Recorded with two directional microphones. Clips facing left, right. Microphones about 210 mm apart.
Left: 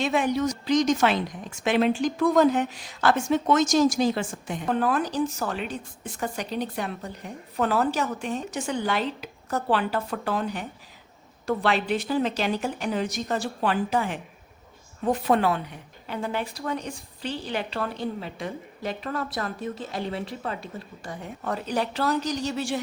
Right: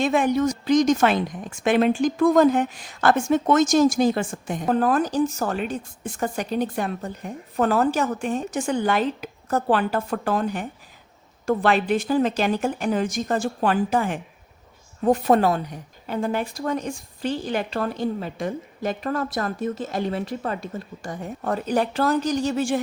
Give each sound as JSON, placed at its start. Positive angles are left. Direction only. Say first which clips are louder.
{"t": 0.0, "sound": "speech", "louder": "right 4 dB", "side_deg": -50}